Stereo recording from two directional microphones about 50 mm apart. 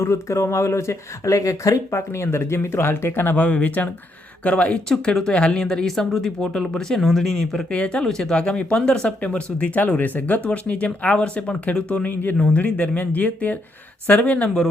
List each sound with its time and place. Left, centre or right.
0.0 s speech: left
3.3 s speech: left
4.9 s speech: centre
7.7 s speech: left
10.4 s speech: left
12.0 s speech: left
12.4 s speech: left